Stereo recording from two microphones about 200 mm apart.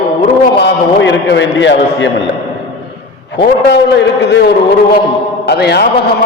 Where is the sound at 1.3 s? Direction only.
65° left (ahead or behind).